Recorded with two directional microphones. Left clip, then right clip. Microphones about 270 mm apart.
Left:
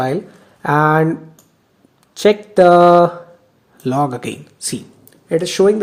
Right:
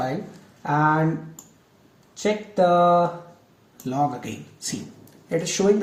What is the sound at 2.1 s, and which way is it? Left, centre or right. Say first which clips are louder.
Speech: left 11 dB; left.